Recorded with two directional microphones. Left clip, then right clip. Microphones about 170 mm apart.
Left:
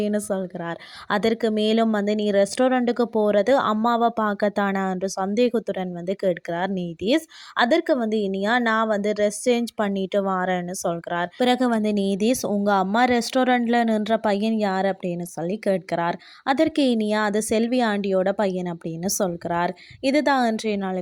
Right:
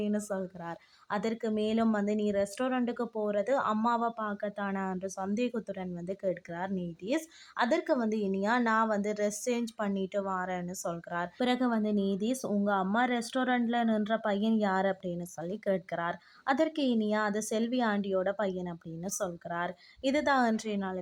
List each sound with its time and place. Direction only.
0.0 s speech: 35° left (ahead or behind)
4.2 s speech: 55° left (ahead or behind); by 21.0 s 35° left (ahead or behind)